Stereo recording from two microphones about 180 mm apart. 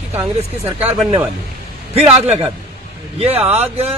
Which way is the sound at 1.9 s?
35° right (ahead or behind).